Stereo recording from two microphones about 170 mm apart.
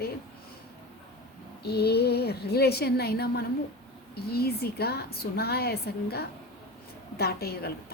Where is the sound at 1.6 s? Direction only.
70° left (ahead or behind).